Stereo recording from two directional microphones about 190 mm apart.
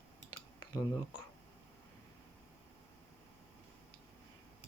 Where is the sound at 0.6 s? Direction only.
25° left (ahead or behind).